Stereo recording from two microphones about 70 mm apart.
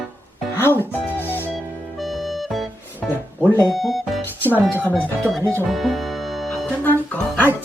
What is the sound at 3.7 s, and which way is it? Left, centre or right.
Music, centre.